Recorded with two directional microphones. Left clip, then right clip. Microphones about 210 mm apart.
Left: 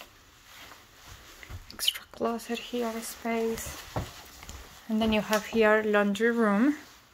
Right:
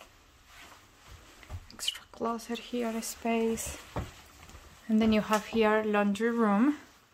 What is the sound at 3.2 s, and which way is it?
Speech, 35° right (ahead or behind).